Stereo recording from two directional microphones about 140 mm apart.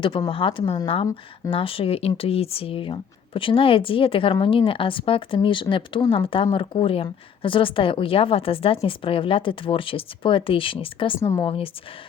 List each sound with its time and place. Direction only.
0.3 s speech: 40° left (ahead or behind)
11.2 s speech: 25° left (ahead or behind)
11.4 s speech: 40° left (ahead or behind)